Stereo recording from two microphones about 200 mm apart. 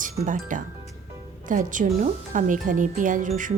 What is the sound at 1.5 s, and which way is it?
Speech, 40° right (ahead or behind).